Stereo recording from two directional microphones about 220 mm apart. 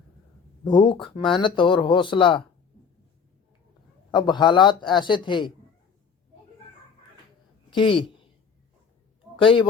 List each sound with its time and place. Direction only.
0.6 s speech: 20° left (ahead or behind)
4.1 s speech: 20° left (ahead or behind)
7.7 s speech: 20° left (ahead or behind)
9.4 s speech: 25° left (ahead or behind)